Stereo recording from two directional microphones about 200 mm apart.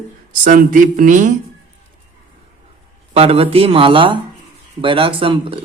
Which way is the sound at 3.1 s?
30° right (ahead or behind).